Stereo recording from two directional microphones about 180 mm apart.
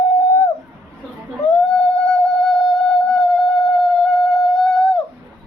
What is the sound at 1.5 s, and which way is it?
Music, centre (ahead or behind).